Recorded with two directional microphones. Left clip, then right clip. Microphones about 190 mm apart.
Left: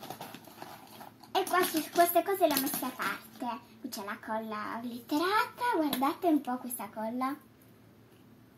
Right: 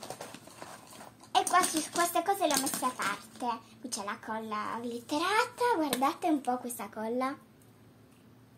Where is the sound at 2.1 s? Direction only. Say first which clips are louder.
Left 1 dB; 40° right (ahead or behind).